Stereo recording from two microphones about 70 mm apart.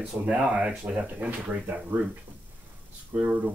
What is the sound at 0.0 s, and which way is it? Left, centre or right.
Speech, centre.